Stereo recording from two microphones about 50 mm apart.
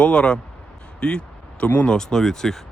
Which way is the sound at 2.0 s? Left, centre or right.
Centre.